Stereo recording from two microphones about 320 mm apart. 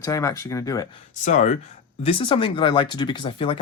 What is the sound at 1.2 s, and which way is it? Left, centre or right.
Speech, left.